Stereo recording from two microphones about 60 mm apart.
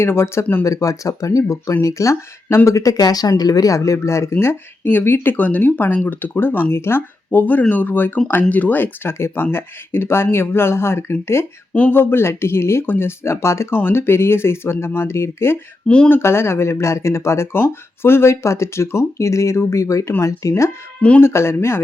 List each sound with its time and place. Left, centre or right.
0.0 s speech: left
0.6 s speech: left
2.6 s speech: left
11.7 s speech: left
11.9 s speech: left
13.7 s speech: left
21.2 s speech: left